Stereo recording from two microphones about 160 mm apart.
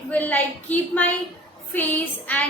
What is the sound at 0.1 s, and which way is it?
A woman's voice, 10° left (ahead or behind).